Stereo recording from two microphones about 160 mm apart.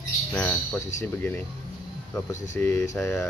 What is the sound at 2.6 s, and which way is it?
Speech, 15° left (ahead or behind).